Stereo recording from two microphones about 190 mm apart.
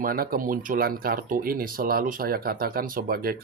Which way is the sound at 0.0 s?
50° right (ahead or behind).